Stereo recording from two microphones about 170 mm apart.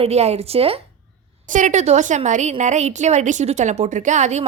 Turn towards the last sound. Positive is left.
turn(degrees=-45)  # may be behind; listen again after turning